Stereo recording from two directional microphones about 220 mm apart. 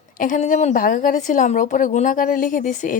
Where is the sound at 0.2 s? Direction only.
35° left (ahead or behind).